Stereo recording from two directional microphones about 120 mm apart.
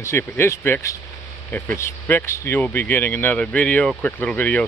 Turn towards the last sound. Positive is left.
turn(degrees=10)  # may be behind; listen again after turning